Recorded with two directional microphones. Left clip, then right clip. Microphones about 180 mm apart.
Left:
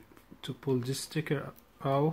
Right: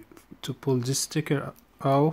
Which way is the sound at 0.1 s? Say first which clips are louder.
Right 5 dB; 50° right (ahead or behind).